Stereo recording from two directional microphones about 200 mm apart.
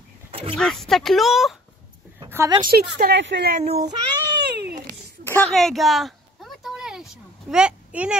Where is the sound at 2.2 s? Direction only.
15° right (ahead or behind).